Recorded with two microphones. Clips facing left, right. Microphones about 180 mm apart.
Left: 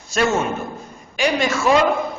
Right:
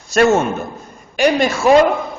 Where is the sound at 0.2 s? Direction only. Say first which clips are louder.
Right 7 dB; 55° right (ahead or behind).